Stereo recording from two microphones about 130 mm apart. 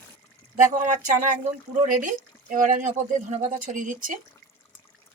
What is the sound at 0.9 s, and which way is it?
Speech, 80° right.